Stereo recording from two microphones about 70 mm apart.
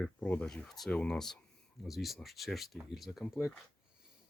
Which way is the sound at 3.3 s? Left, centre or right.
Centre.